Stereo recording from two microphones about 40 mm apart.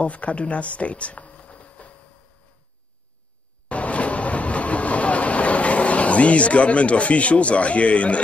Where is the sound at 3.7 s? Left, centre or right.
Left.